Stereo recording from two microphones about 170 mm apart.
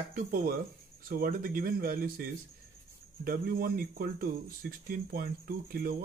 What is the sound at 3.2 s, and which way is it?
Speech, 55° right (ahead or behind).